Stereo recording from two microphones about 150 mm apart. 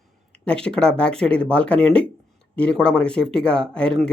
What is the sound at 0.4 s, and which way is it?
Speech, 5° left (ahead or behind).